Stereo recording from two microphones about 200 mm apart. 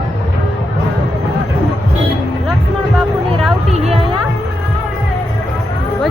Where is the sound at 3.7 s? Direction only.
30° right (ahead or behind).